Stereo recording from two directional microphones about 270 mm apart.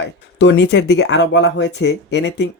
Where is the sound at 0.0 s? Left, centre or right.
Left.